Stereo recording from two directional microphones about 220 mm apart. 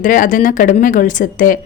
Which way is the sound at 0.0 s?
35° left (ahead or behind).